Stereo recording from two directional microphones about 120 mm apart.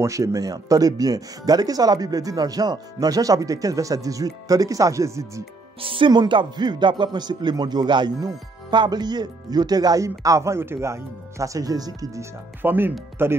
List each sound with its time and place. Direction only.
0.0 s speech: 25° right (ahead or behind)
5.8 s speech: 45° right (ahead or behind); by 13.4 s 20° right (ahead or behind)